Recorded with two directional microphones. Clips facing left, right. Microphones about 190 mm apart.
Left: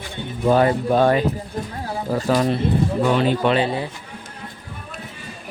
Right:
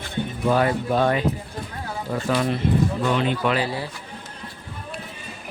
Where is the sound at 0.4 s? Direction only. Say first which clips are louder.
Left 4 dB; 30° left (ahead or behind).